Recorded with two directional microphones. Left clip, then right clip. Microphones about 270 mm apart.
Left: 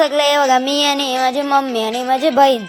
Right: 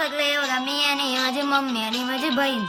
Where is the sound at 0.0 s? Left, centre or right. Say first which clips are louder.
Left 10 dB; left.